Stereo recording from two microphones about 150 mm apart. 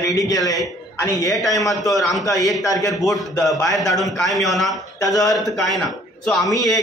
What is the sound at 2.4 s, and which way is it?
Speech, 25° left (ahead or behind).